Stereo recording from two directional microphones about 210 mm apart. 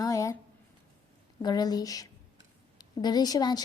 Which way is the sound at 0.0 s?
15° left (ahead or behind).